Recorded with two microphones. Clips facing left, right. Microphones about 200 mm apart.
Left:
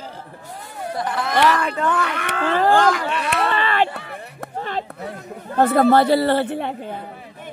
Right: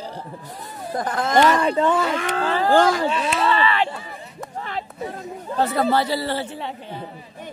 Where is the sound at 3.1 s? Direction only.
60° left (ahead or behind).